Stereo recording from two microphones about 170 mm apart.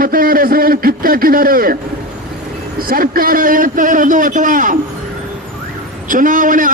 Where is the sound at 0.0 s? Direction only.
60° right (ahead or behind).